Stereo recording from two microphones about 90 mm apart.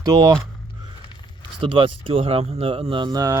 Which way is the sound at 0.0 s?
50° right (ahead or behind).